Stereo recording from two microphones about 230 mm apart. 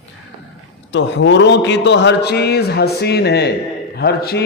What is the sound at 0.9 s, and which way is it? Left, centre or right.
A man's voice, left.